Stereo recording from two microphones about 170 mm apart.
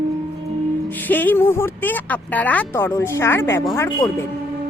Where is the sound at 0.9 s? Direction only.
10° left (ahead or behind).